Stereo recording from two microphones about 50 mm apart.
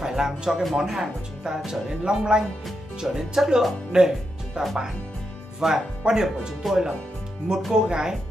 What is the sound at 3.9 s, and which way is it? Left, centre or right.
Music, centre.